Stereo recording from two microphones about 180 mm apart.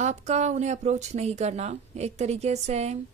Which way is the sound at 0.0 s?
40° right (ahead or behind).